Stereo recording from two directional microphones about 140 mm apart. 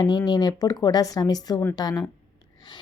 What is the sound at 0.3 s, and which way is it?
A woman's voice, 30° left (ahead or behind).